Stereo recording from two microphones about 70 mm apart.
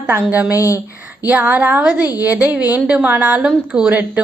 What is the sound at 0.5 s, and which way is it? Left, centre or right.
Speech, left.